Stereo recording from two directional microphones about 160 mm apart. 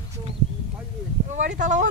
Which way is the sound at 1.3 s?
50° right (ahead or behind).